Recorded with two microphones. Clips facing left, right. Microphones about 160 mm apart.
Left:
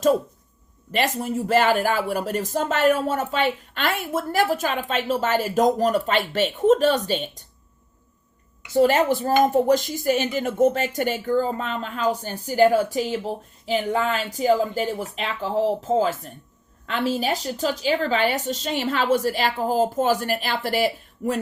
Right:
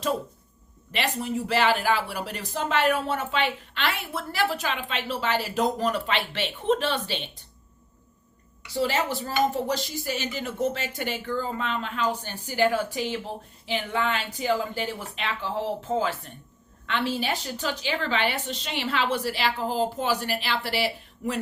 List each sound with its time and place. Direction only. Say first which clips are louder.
0.9 s speech: left 5 dB; 45° left (ahead or behind)
8.7 s speech: left 8 dB; 50° left (ahead or behind)